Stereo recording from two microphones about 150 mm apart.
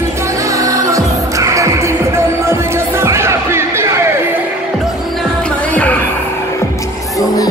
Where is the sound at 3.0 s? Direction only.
15° right (ahead or behind).